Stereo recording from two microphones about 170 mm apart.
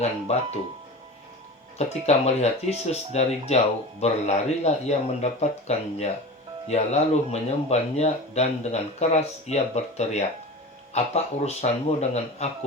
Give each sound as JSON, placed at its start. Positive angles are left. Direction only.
{"t": 0.0, "sound": "speech", "side_deg": 40}
{"t": 2.0, "sound": "speech", "side_deg": 40}